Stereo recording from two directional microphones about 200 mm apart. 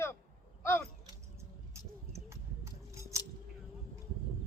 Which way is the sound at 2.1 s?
15° right (ahead or behind).